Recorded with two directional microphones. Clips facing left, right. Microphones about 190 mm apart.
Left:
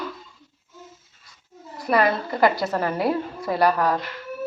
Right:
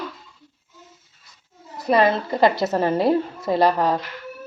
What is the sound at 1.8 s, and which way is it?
A woman's voice, 25° right (ahead or behind).